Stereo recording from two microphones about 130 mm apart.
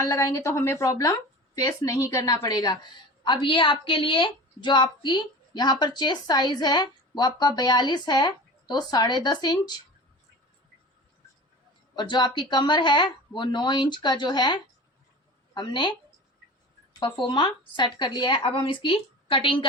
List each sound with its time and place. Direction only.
0.0 s a woman's voice: 25° left (ahead or behind)
11.9 s a woman's voice: 35° left (ahead or behind)